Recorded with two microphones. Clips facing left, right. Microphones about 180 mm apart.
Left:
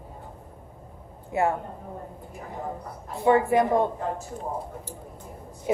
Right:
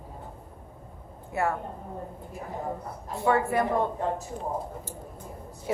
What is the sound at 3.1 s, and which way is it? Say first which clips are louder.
Speech: left 4 dB; 20° left (ahead or behind).